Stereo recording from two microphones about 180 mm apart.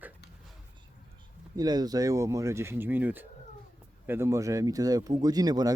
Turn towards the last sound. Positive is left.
turn(degrees=-20)  # may be behind; listen again after turning